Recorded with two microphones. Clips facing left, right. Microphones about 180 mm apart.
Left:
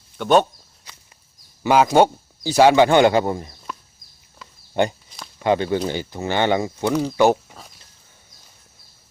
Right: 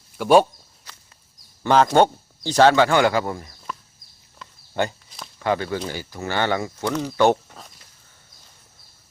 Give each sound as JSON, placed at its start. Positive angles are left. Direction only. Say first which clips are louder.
{"t": 0.2, "sound": "speech", "louder": "right 1 dB", "side_deg": -5}
{"t": 1.6, "sound": "speech", "louder": "left 1 dB", "side_deg": 10}
{"t": 4.7, "sound": "speech", "louder": "left 4 dB", "side_deg": 20}
{"t": 6.9, "sound": "speech", "louder": "left 1 dB", "side_deg": 10}